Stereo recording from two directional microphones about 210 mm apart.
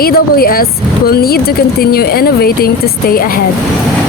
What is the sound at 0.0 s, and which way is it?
Speech, 45° left (ahead or behind).